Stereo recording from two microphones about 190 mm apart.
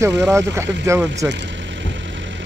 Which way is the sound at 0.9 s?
15° right (ahead or behind).